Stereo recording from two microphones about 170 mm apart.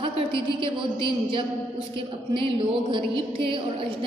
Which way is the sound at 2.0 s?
30° right (ahead or behind).